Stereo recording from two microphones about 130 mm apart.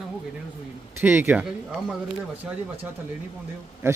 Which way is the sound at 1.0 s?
15° right (ahead or behind).